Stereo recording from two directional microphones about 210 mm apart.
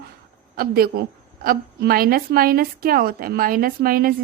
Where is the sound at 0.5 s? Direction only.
45° right (ahead or behind).